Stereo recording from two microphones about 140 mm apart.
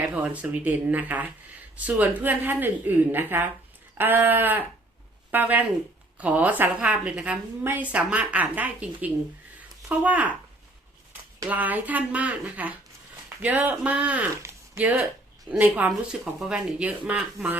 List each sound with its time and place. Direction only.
0.0 s a woman's voice: 10° right (ahead or behind)
11.4 s a woman's voice: 10° right (ahead or behind)